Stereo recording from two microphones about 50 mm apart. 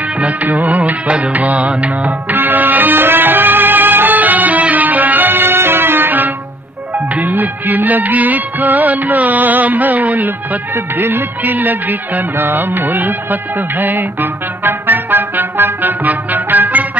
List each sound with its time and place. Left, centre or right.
0.2 s music: right
10.7 s music: right